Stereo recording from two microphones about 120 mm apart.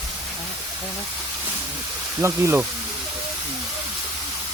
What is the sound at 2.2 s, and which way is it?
Speech, 20° right (ahead or behind).